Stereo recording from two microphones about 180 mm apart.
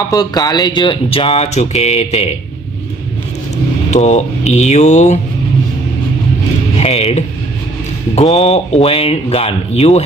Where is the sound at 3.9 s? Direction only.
40° left (ahead or behind).